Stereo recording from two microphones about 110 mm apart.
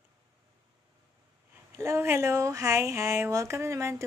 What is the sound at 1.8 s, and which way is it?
Speech, 25° right (ahead or behind).